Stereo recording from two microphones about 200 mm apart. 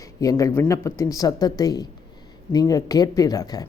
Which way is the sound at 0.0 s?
15° left (ahead or behind).